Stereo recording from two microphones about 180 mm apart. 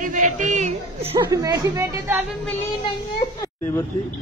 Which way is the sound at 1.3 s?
20° right (ahead or behind).